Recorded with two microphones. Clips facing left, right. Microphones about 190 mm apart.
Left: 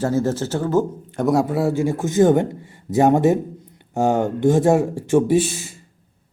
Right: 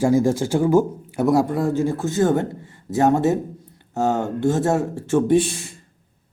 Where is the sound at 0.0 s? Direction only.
10° right (ahead or behind).